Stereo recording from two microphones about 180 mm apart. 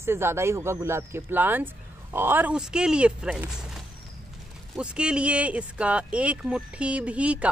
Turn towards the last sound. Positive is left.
turn(degrees=-5)  # may be behind; listen again after turning